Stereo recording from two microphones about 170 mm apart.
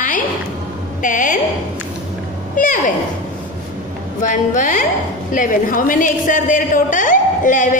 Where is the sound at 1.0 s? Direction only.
50° left (ahead or behind).